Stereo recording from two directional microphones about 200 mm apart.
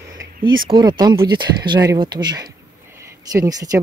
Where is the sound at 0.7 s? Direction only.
20° right (ahead or behind).